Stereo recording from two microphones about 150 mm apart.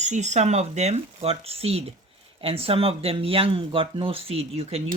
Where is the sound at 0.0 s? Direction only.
50° right (ahead or behind).